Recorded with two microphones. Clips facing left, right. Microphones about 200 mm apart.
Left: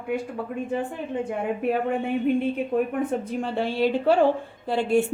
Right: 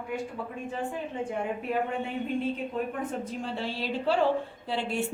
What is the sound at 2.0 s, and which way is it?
A woman's voice, 60° left (ahead or behind).